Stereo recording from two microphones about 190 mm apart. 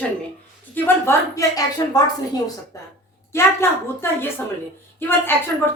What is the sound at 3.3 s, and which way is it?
A woman's voice, 15° left (ahead or behind).